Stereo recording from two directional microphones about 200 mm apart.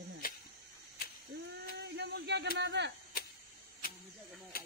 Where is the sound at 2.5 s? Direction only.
60° right (ahead or behind).